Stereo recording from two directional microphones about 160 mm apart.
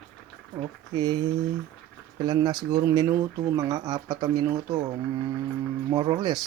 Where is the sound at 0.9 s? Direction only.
25° right (ahead or behind).